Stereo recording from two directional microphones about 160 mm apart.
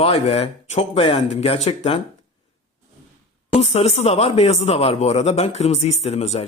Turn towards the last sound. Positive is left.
turn(degrees=45)  # may be behind; listen again after turning